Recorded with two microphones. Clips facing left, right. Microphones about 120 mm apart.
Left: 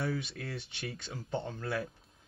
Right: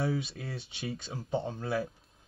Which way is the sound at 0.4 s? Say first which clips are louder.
Right 1 dB; 25° right (ahead or behind).